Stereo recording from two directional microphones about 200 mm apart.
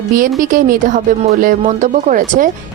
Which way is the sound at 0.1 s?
40° right (ahead or behind).